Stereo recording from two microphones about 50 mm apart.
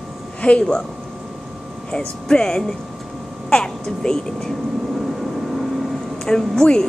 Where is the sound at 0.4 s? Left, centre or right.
Left.